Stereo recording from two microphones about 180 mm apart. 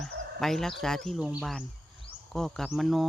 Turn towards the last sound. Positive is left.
turn(degrees=0)  # may be behind; listen again after turning